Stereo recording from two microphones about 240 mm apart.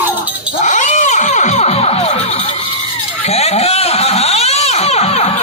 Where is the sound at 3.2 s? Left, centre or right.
Left.